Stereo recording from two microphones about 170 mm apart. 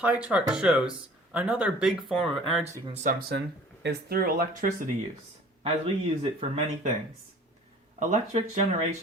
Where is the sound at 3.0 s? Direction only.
60° right (ahead or behind).